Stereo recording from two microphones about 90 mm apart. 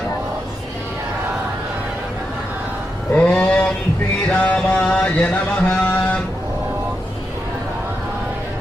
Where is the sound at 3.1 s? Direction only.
15° left (ahead or behind).